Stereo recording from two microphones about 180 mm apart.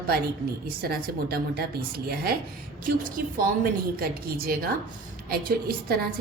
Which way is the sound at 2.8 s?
50° right (ahead or behind).